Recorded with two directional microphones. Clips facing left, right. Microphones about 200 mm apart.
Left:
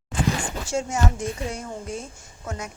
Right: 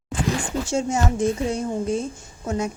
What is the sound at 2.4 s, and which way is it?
Speech, 25° right (ahead or behind).